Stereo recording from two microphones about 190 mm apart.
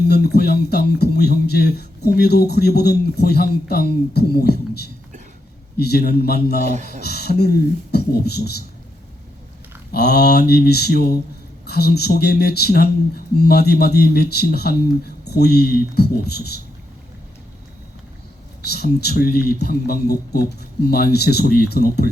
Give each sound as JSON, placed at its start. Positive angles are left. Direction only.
{"t": 0.1, "sound": "speech", "side_deg": 60}
{"t": 9.9, "sound": "speech", "side_deg": 60}
{"t": 18.7, "sound": "speech", "side_deg": 60}